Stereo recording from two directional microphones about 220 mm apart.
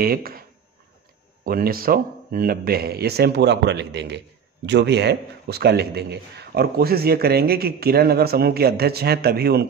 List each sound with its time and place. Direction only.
0.0 s speech: 40° right (ahead or behind)
1.4 s a man's voice: 40° right (ahead or behind)